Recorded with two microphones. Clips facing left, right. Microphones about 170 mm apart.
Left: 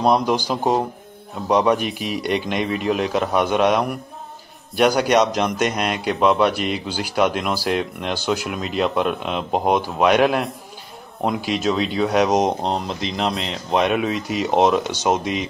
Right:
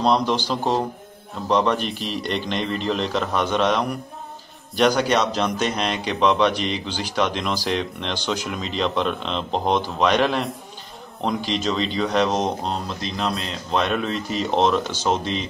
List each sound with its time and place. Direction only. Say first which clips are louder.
0.0 s speech: left 2 dB; 10° left (ahead or behind)